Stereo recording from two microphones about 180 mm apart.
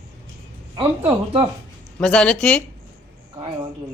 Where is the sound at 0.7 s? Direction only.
30° right (ahead or behind).